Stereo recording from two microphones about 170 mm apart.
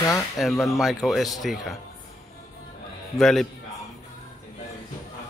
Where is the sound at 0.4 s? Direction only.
Centre (ahead or behind).